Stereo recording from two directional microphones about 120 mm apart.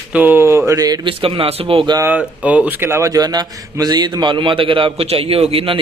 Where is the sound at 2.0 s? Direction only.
10° right (ahead or behind).